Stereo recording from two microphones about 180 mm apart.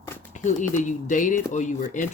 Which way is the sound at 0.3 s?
45° left (ahead or behind).